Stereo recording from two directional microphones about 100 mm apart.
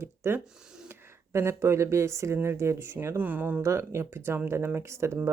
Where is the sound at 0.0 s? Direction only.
25° right (ahead or behind).